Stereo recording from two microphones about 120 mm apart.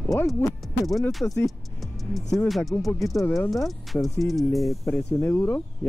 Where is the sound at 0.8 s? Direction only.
Centre (ahead or behind).